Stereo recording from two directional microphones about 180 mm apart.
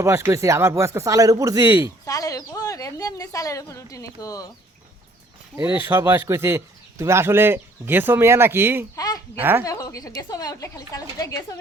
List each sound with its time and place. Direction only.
0.0 s speech: 15° right (ahead or behind)
2.0 s a woman's voice: 20° left (ahead or behind)
5.7 s speech: 10° right (ahead or behind)
9.0 s a sound: 20° left (ahead or behind)
9.4 s speech: 10° right (ahead or behind)
9.6 s a woman's voice: 20° left (ahead or behind)